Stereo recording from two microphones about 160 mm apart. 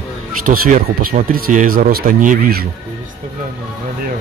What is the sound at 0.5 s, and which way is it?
Speech, 50° right (ahead or behind).